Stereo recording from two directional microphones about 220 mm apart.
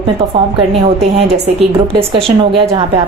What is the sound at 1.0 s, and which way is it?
A woman's voice, 30° right (ahead or behind).